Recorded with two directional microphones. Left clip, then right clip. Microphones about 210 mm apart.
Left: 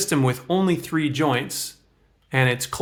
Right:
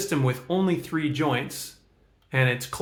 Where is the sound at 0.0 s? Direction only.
35° left (ahead or behind).